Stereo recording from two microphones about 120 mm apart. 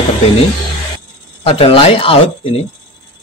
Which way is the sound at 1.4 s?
50° left (ahead or behind).